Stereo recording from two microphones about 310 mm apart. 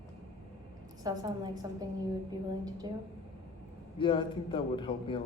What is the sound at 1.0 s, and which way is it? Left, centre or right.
Speech, centre.